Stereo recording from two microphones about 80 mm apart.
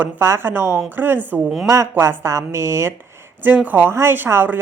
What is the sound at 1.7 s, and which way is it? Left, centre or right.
Speech, right.